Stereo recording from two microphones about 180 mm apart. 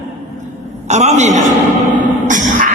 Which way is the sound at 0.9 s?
40° right (ahead or behind).